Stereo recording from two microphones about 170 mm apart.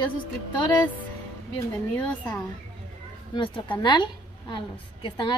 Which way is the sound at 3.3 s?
30° left (ahead or behind).